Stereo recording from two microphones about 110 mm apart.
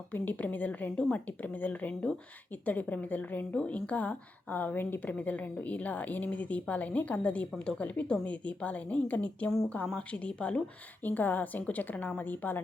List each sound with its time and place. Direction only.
0.1 s a woman's voice: 15° left (ahead or behind)